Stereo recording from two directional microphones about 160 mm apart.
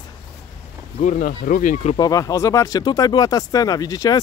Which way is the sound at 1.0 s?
55° left (ahead or behind).